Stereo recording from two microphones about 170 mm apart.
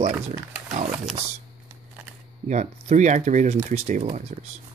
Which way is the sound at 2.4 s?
45° right (ahead or behind).